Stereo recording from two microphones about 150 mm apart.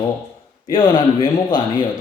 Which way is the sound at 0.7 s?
30° left (ahead or behind).